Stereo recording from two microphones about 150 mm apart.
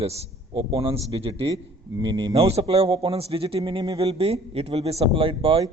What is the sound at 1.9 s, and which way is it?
A man's voice, 30° right (ahead or behind).